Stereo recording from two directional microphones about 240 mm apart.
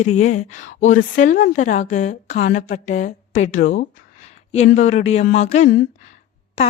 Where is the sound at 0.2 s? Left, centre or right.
Left.